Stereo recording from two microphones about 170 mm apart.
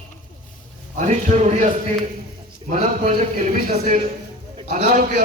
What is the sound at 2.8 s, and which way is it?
Speech, 45° right (ahead or behind).